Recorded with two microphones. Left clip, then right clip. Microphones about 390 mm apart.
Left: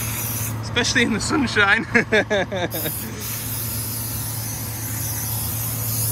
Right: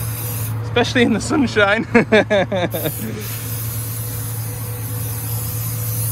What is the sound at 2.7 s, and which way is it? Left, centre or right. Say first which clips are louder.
Speech: right 5 dB; right.